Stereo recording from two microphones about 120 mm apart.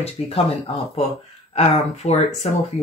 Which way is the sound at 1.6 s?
65° left (ahead or behind).